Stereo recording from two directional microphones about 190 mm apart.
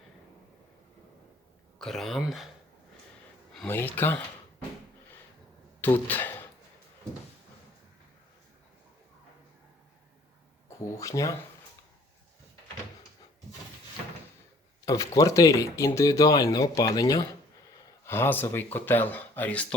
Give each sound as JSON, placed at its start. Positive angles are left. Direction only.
{"t": 1.8, "sound": "speech", "side_deg": 0}
{"t": 3.5, "sound": "speech", "side_deg": 10}
{"t": 5.8, "sound": "speech", "side_deg": 10}
{"t": 10.9, "sound": "speech", "side_deg": 15}
{"t": 14.8, "sound": "speech", "side_deg": 20}